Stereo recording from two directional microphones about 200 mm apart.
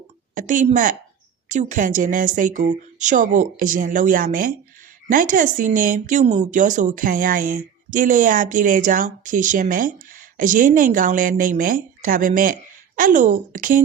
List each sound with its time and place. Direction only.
0.3 s speech: 40° right (ahead or behind)